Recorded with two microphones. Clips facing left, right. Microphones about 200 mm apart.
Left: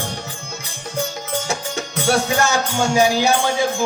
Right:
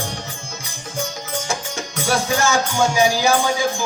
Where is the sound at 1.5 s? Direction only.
65° left (ahead or behind).